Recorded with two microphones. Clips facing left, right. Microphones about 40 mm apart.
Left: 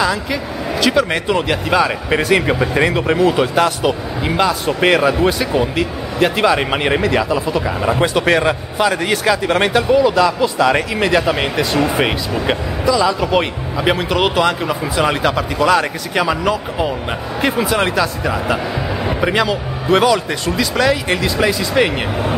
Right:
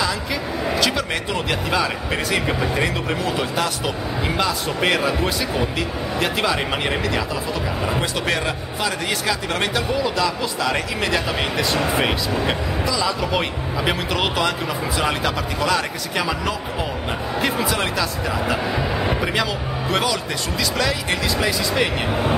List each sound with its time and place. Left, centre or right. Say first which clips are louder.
0.0 s a man's voice: left 5 dB; centre